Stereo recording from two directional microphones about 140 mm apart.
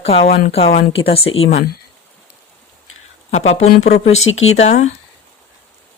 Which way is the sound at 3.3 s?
50° left (ahead or behind).